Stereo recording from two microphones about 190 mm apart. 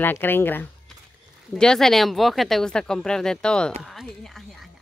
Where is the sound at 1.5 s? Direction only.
5° left (ahead or behind).